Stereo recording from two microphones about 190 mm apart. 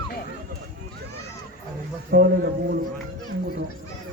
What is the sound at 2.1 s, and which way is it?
Speech, 55° right (ahead or behind).